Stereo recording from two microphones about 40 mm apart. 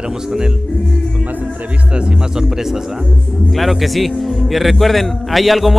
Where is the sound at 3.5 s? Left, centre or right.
Centre.